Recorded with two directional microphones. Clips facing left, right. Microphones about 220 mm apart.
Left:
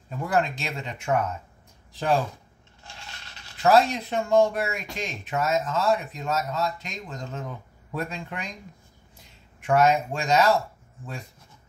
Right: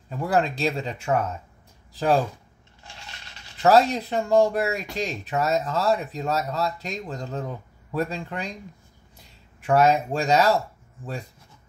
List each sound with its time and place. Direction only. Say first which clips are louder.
0.3 s speech: right 3 dB; 35° right (ahead or behind)
3.6 s speech: right 2 dB; 40° right (ahead or behind)
9.6 s speech: right 1 dB; 35° right (ahead or behind)